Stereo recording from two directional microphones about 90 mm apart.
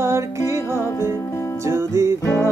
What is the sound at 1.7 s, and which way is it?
Music, 35° right (ahead or behind).